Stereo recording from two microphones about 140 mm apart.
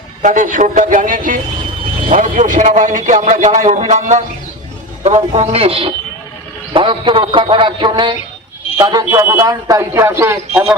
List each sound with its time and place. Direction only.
0.2 s a man's voice: 65° right (ahead or behind); by 10.4 s 20° right (ahead or behind)